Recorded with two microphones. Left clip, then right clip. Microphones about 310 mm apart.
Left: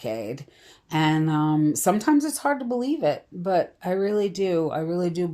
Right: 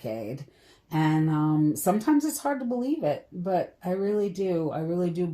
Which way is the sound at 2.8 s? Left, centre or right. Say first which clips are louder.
Left 3 dB; left.